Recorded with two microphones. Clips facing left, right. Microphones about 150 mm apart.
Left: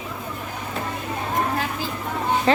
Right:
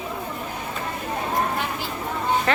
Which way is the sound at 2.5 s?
25° left (ahead or behind).